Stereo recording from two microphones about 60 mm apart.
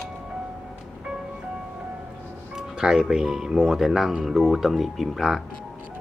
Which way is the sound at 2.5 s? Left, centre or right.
Centre.